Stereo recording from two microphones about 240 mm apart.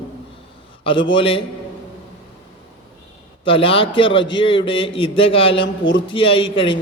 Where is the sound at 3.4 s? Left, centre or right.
Left.